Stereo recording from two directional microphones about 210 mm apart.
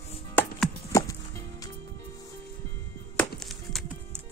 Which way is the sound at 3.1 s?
Centre (ahead or behind).